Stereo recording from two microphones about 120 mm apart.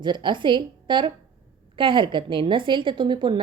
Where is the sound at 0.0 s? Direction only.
40° right (ahead or behind).